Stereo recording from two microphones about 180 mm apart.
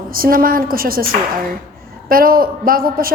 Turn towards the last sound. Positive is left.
turn(degrees=-55)  # may be behind; listen again after turning